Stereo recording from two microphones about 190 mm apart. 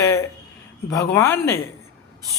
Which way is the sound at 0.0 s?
15° left (ahead or behind).